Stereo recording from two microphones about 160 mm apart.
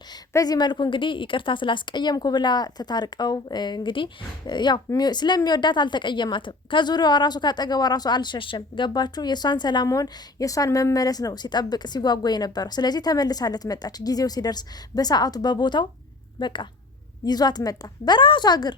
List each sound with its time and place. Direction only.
0.1 s a woman's voice: 25° left (ahead or behind)